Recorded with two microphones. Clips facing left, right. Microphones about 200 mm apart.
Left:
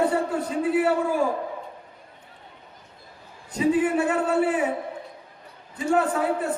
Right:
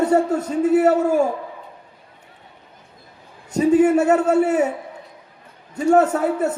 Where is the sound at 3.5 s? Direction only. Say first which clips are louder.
Right 7 dB; 45° right (ahead or behind).